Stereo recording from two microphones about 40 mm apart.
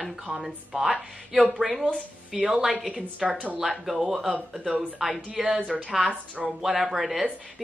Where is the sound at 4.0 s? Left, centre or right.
Centre.